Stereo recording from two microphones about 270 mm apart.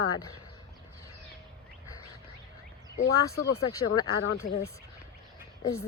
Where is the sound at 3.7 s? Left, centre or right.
Centre.